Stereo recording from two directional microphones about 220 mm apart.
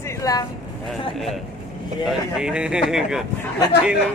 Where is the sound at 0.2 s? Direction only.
15° left (ahead or behind).